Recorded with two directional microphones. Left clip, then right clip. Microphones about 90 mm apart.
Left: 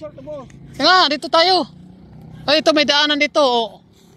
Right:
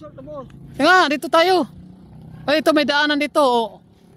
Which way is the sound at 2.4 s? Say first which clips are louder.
Left 2 dB; 55° right (ahead or behind).